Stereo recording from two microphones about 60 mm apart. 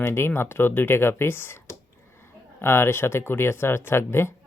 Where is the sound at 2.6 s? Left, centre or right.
Left.